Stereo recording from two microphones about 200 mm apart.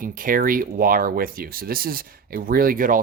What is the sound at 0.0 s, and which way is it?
Speech, 45° right (ahead or behind).